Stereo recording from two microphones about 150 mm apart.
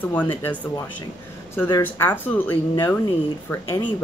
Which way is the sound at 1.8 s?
15° left (ahead or behind).